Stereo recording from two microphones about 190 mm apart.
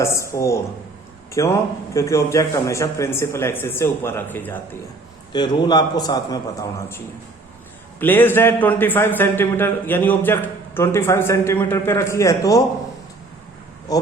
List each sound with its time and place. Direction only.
0.0 s a man's voice: 15° left (ahead or behind)
5.3 s a man's voice: 20° left (ahead or behind)
13.9 s a man's voice: 20° left (ahead or behind)